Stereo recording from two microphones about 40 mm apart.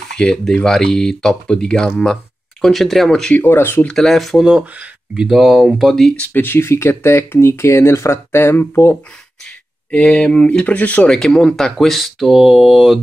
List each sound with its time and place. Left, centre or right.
0.1 s speech: centre
2.7 s mantra: centre
3.1 s speech: centre
3.4 s speech: left
3.9 s speech: centre
4.2 s mantra: centre
4.6 s speech: right; by 5.9 s centre
6.3 s speech: left
9.8 s speech: left
11.1 s speech: centre
12.0 s mantra: centre